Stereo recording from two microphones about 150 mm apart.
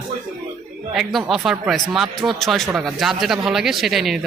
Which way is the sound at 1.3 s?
Centre (ahead or behind).